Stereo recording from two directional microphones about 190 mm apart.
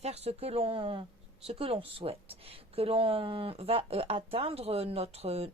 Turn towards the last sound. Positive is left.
turn(degrees=-35)  # may be behind; listen again after turning